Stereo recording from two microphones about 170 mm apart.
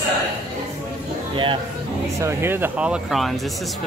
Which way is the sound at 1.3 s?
30° right (ahead or behind).